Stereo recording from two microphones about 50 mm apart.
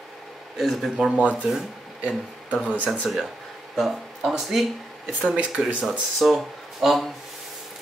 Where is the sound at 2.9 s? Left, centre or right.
Centre.